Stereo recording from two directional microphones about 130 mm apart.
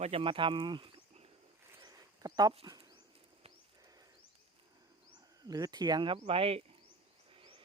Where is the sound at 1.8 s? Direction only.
30° right (ahead or behind).